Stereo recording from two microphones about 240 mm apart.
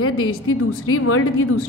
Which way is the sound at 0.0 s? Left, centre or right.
Left.